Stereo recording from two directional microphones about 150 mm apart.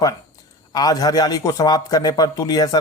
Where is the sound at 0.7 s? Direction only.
25° left (ahead or behind).